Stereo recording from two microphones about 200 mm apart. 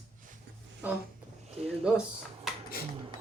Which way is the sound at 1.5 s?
30° right (ahead or behind).